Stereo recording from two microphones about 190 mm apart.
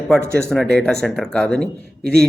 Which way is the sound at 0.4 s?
Centre (ahead or behind).